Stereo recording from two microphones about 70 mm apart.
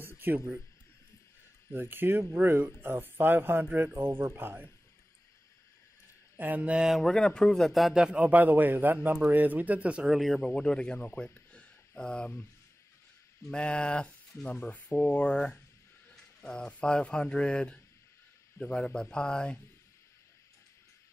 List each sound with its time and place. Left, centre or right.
0.0 s a sound: right
1.7 s a man's voice: right
6.3 s speech: right
6.8 s a man's voice: centre
8.2 s a man's voice: right
10.0 s speech: centre
11.0 s speech: left
13.5 s speech: centre